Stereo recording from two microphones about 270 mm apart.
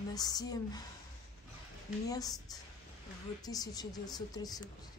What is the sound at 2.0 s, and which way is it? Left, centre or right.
A woman's voice, centre.